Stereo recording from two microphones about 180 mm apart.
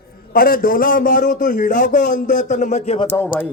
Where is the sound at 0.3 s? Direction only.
55° left (ahead or behind).